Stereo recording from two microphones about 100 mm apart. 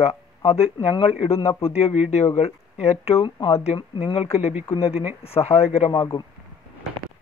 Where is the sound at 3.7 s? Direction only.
65° left (ahead or behind); by 5.9 s 90° left.